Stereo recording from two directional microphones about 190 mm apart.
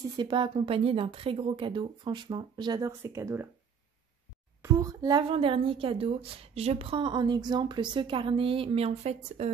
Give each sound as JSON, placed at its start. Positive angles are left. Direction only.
{"t": 0.1, "sound": "speech", "side_deg": -25}
{"t": 4.6, "sound": "speech", "side_deg": -15}